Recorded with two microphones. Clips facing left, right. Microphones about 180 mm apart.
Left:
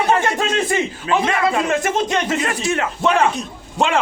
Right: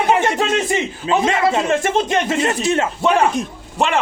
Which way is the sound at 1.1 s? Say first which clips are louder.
Right 2 dB; 25° right (ahead or behind).